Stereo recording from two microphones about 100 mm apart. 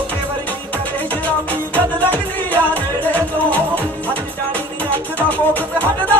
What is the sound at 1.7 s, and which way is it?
Music, 15° left (ahead or behind).